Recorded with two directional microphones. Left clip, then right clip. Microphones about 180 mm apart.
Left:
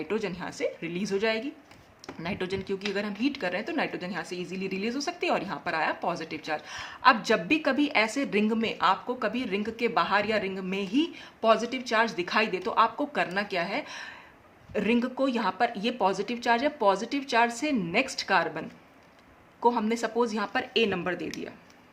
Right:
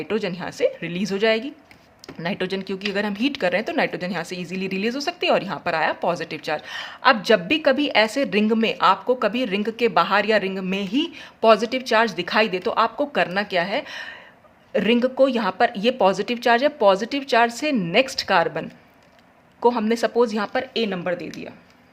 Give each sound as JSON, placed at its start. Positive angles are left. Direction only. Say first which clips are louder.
{"t": 0.0, "sound": "speech", "louder": "right 6 dB", "side_deg": -30}